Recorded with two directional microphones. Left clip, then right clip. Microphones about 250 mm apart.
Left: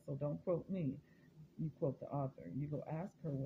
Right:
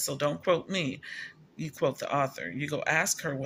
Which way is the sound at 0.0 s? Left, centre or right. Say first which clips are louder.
Right 14 dB; right.